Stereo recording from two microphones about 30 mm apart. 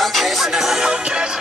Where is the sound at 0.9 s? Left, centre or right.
Right.